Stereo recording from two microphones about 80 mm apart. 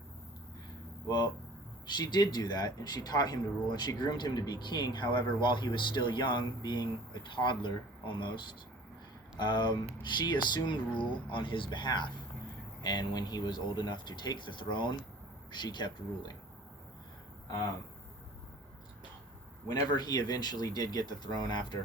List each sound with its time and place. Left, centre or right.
1.0 s speech: left
6.6 s speech: left
9.4 s speech: left
12.8 s speech: left
19.7 s speech: left